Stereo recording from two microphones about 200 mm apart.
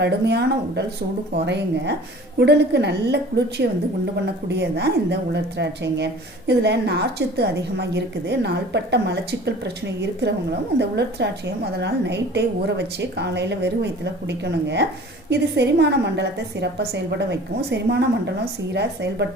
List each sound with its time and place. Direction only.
0.0 s a woman's voice: 55° right (ahead or behind)